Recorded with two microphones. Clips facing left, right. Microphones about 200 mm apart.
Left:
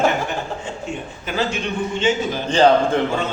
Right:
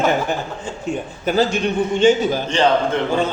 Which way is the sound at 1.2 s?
40° right (ahead or behind).